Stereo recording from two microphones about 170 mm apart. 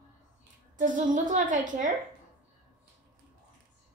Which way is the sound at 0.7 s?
50° right (ahead or behind).